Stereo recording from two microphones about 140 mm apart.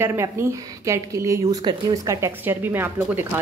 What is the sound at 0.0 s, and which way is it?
Speech, 20° right (ahead or behind).